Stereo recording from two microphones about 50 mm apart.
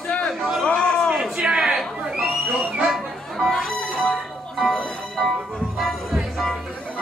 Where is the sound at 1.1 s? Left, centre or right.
Centre.